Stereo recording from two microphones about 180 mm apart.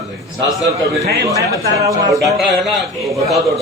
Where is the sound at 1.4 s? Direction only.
20° right (ahead or behind).